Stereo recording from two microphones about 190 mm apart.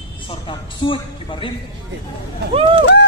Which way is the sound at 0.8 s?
30° left (ahead or behind).